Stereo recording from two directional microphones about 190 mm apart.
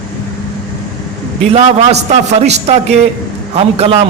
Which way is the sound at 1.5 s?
35° right (ahead or behind).